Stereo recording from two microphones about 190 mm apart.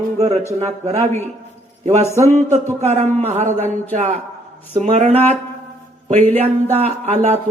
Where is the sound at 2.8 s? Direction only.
35° right (ahead or behind).